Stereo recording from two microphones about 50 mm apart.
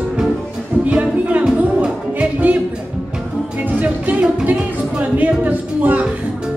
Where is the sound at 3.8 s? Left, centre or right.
Right.